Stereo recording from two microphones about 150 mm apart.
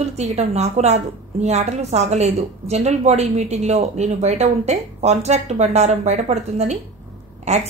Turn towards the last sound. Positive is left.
turn(degrees=-50)  # may be behind; listen again after turning